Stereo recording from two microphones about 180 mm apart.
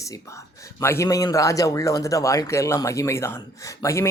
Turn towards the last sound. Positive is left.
turn(degrees=15)  # may be behind; listen again after turning